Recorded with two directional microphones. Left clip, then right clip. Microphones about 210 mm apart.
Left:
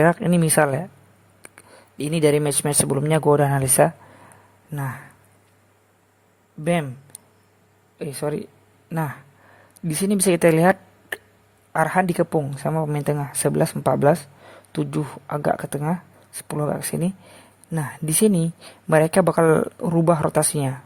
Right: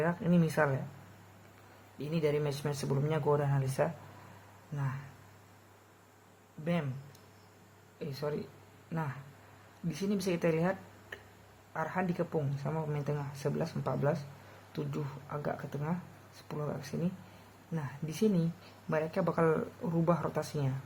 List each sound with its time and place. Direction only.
0.0 s speech: 45° left (ahead or behind)
2.0 s speech: 45° left (ahead or behind)
6.7 s a woman's voice: 45° left (ahead or behind)